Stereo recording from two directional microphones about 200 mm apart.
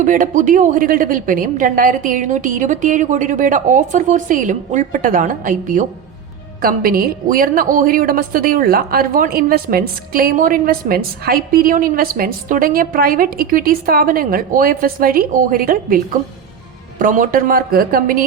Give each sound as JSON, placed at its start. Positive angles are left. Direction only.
{"t": 0.0, "sound": "a woman's voice", "side_deg": -40}
{"t": 17.0, "sound": "a woman's voice", "side_deg": -40}